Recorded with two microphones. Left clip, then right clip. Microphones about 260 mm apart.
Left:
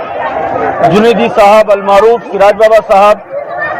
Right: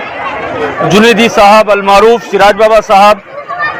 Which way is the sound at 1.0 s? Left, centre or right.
Right.